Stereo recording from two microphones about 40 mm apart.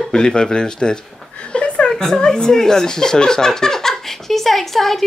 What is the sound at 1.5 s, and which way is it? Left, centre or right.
Chuckle, left.